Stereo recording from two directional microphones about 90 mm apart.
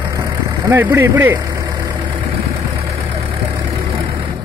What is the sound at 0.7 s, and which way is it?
Speech, 20° right (ahead or behind).